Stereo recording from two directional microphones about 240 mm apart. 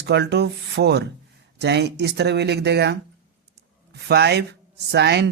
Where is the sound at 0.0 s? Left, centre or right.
Right.